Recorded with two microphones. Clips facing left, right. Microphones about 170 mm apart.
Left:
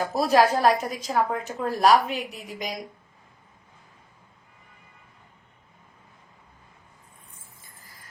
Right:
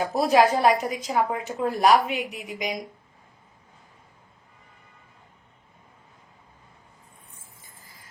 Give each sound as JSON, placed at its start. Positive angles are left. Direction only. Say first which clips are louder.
{"t": 0.0, "sound": "a woman's voice", "louder": "right 1 dB", "side_deg": -15}